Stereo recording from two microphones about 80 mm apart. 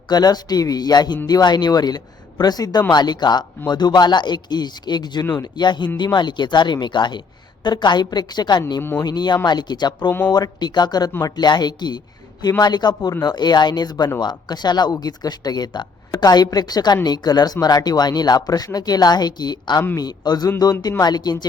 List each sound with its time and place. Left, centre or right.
0.1 s speech: left
10.1 s speech: left
10.3 s speech: left